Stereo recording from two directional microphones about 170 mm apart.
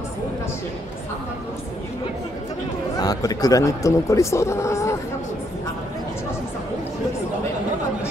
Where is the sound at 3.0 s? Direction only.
20° left (ahead or behind).